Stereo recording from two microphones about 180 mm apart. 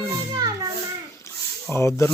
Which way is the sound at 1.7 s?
15° left (ahead or behind).